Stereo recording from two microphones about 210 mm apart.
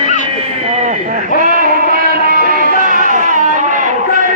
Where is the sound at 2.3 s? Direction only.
45° right (ahead or behind).